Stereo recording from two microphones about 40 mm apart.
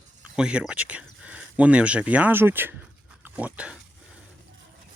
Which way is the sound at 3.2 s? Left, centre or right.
Right.